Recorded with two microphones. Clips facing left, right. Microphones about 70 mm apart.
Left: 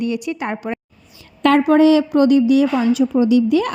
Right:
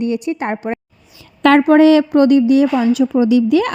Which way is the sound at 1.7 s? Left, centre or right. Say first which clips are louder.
Right 2 dB; right.